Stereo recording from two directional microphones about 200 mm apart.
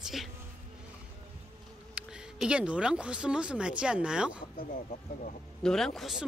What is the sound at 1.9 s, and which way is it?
Speech, 5° right (ahead or behind).